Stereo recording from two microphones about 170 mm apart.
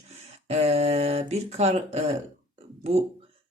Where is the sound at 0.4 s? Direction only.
40° right (ahead or behind).